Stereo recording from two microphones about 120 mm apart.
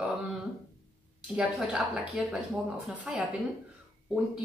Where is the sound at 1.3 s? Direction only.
5° right (ahead or behind).